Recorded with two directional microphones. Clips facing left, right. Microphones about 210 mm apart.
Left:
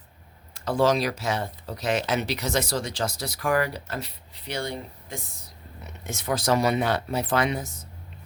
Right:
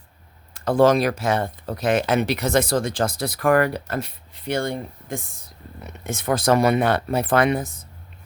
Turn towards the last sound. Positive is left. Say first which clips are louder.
# right 6 dB
turn(degrees=-55)  # may be behind; listen again after turning